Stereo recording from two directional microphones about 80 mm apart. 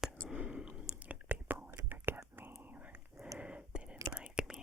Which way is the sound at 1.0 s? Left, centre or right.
Right.